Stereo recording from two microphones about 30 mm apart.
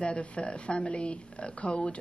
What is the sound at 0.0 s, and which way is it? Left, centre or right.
A woman's voice, left.